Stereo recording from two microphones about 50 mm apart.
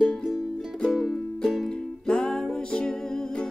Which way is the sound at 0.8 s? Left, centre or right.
Centre.